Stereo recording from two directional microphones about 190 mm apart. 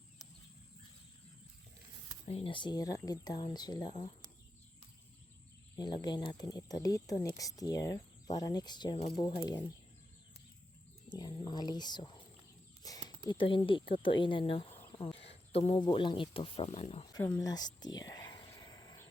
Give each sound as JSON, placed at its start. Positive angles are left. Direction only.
{"t": 2.2, "sound": "speech", "side_deg": 30}
{"t": 5.7, "sound": "speech", "side_deg": 20}
{"t": 11.1, "sound": "speech", "side_deg": 20}
{"t": 12.8, "sound": "a sound", "side_deg": 20}
{"t": 13.3, "sound": "speech", "side_deg": 25}
{"t": 17.2, "sound": "speech", "side_deg": 20}
{"t": 17.7, "sound": "whispering", "side_deg": 20}